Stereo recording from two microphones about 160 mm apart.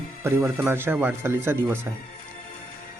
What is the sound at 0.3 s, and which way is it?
A man's voice, 15° right (ahead or behind).